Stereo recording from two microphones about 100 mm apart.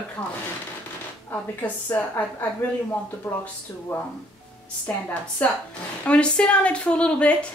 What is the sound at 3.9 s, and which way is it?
A woman's voice, 20° left (ahead or behind).